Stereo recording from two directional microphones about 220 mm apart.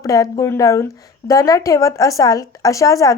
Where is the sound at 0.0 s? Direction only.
15° left (ahead or behind).